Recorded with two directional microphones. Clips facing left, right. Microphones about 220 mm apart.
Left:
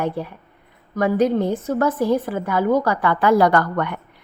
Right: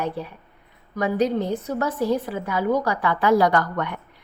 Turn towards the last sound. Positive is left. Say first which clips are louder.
# left 3 dB
turn(degrees=55)  # may be behind; listen again after turning